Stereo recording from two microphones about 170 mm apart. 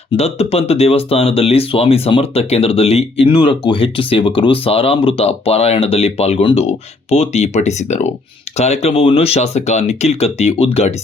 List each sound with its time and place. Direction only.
0.2 s speech: 35° left (ahead or behind)